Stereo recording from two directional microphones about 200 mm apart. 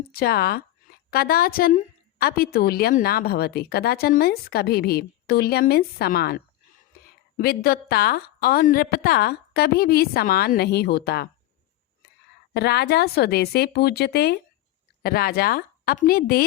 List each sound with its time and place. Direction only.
0.1 s a woman's voice: 50° left (ahead or behind)
12.5 s a woman's voice: 55° left (ahead or behind)